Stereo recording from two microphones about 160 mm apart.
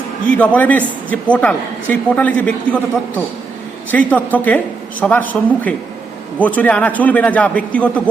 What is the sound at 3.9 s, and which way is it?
A woman's voice, 10° left (ahead or behind).